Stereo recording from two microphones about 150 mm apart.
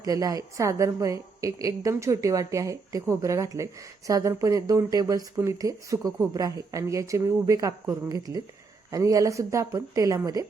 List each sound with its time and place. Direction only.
0.0 s a woman's voice: 25° right (ahead or behind)